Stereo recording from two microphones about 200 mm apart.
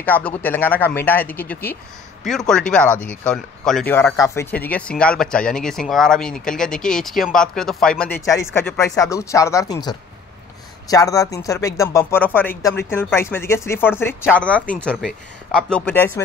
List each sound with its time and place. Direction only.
0.0 s speech: 10° left (ahead or behind)